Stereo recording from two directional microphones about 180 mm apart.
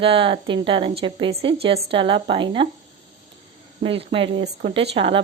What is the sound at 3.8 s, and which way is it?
A woman's voice, 30° right (ahead or behind).